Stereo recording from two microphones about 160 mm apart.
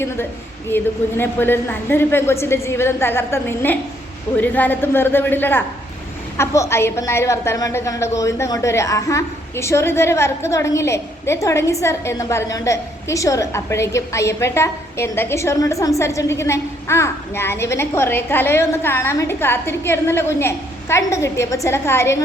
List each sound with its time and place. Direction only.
0.7 s a woman's voice: 15° left (ahead or behind)